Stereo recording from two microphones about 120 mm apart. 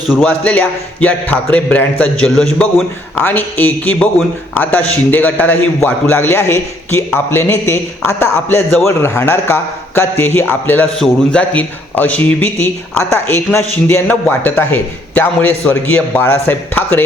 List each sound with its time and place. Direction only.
0.2 s a man's voice: 10° left (ahead or behind)